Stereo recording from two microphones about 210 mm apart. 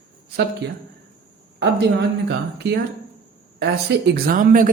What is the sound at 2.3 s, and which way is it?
Speech, 50° right (ahead or behind).